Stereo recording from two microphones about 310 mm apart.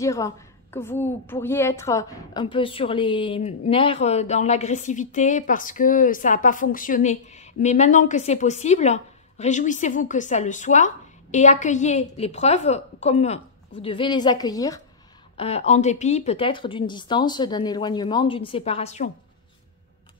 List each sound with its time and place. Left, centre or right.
0.0 s a woman's voice: centre